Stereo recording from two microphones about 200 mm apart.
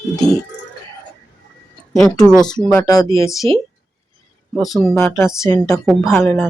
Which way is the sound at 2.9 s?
15° left (ahead or behind).